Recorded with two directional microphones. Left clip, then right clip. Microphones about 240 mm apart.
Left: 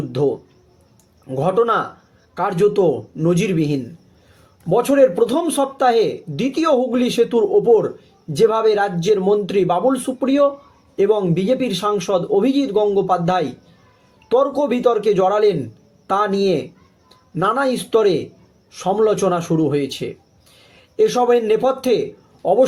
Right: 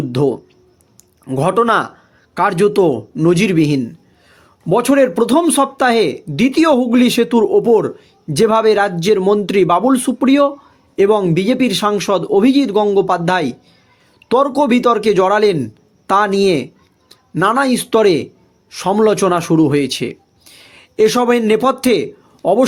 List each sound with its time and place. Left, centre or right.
0.1 s a man's voice: right